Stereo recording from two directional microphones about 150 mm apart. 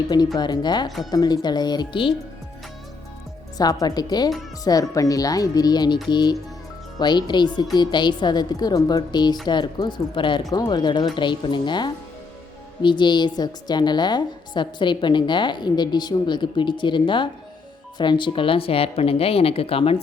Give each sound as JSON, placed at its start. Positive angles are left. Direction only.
{"t": 0.3, "sound": "a woman's voice", "side_deg": 30}
{"t": 3.6, "sound": "a woman's voice", "side_deg": 25}